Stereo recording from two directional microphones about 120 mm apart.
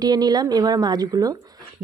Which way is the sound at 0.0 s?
35° right (ahead or behind).